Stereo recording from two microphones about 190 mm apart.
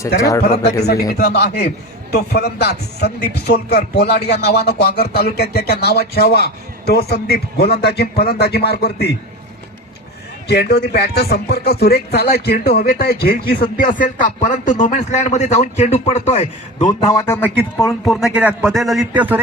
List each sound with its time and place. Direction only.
0.2 s speech: 15° left (ahead or behind)
1.0 s speech: 55° left (ahead or behind)
10.5 s a man's voice: 60° left (ahead or behind); by 19.4 s 10° right (ahead or behind)